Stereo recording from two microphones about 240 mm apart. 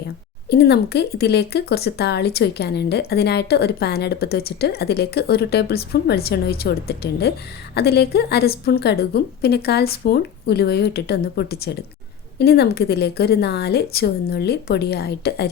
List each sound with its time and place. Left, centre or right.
0.5 s a woman's voice: left